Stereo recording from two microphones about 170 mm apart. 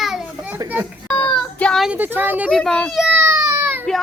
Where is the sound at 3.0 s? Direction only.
15° right (ahead or behind).